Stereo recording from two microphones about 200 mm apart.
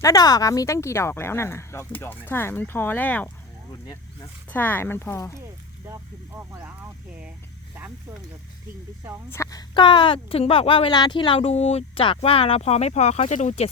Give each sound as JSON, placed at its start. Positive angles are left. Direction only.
{"t": 0.0, "sound": "speech", "side_deg": 20}
{"t": 6.5, "sound": "speech", "side_deg": -15}
{"t": 9.3, "sound": "speech", "side_deg": 15}